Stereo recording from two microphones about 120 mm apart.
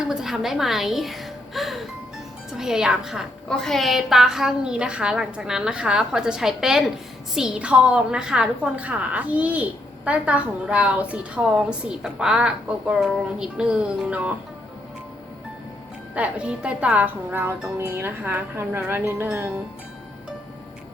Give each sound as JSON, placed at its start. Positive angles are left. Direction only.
{"t": 0.0, "sound": "a sound", "side_deg": -5}
{"t": 2.5, "sound": "a woman's voice", "side_deg": -5}
{"t": 16.1, "sound": "a woman's voice", "side_deg": -10}